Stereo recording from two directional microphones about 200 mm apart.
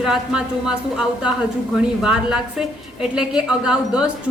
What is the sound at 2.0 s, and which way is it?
Speech, 5° right (ahead or behind).